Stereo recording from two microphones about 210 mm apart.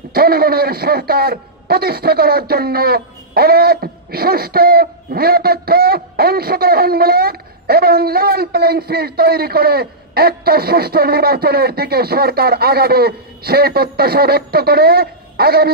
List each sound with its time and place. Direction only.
0.1 s a man's voice: 45° right (ahead or behind)